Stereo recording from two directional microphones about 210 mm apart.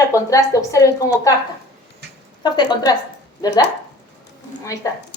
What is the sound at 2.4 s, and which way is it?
Speech, 20° left (ahead or behind).